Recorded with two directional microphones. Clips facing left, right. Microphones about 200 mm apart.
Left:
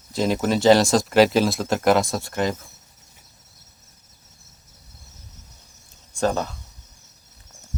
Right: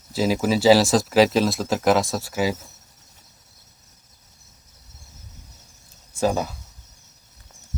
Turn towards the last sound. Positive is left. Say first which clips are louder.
# right 1 dB
turn(degrees=-10)  # may be behind; listen again after turning